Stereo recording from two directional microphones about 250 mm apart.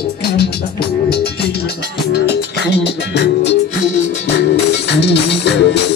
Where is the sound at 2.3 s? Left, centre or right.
Left.